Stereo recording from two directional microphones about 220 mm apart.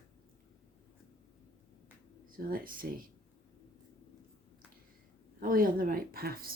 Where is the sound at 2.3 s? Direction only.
40° right (ahead or behind).